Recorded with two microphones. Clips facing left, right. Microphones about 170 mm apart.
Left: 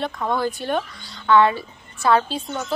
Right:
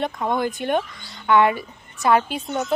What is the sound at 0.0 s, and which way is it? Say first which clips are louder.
A woman's voice: even; 20° right (ahead or behind).